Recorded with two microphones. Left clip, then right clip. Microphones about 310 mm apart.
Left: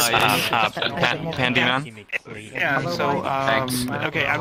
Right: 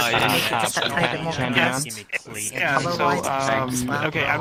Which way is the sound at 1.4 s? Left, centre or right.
Left.